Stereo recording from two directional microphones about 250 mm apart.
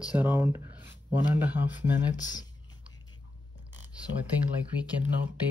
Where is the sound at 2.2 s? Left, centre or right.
Centre.